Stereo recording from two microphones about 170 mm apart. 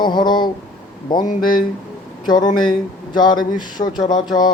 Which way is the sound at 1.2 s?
50° left (ahead or behind).